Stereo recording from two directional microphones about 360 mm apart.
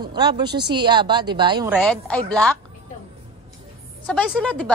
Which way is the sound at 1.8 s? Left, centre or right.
Centre.